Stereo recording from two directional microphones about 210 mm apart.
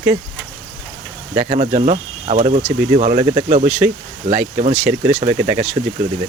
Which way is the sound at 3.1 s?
20° right (ahead or behind).